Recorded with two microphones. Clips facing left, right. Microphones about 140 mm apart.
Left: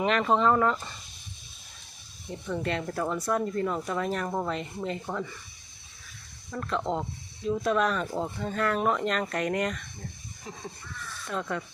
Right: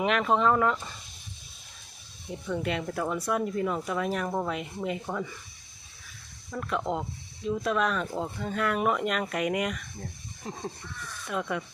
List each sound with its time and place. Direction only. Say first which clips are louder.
0.0 s speech: left 1 dB; centre (ahead or behind)
2.3 s speech: even; 5° right (ahead or behind)
6.5 s speech: even; 5° right (ahead or behind)
10.4 s a sound: right 4 dB; 35° right (ahead or behind)
11.3 s speech: right 1 dB; 10° right (ahead or behind)